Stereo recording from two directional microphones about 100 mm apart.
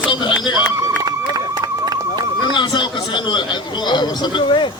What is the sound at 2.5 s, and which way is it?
A man's voice, 50° left (ahead or behind).